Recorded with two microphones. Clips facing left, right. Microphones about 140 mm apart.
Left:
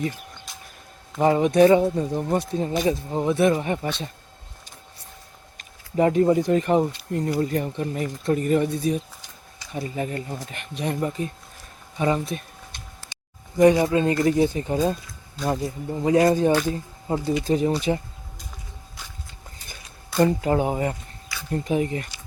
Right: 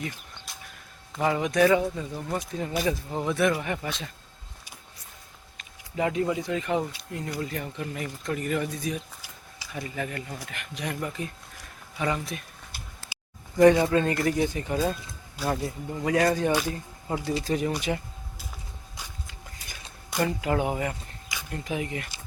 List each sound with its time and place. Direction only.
0.5 s a sound: centre (ahead or behind)
1.2 s speech: 35° left (ahead or behind)
2.8 s speech: 20° left (ahead or behind)
6.0 s speech: 40° left (ahead or behind)
12.7 s a sound: 5° right (ahead or behind)
13.6 s speech: 20° left (ahead or behind)
20.1 s speech: 35° left (ahead or behind)